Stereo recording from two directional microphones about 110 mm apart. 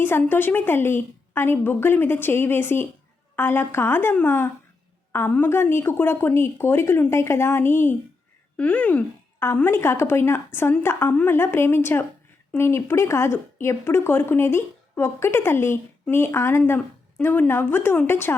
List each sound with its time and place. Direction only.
0.0 s speech: 20° left (ahead or behind)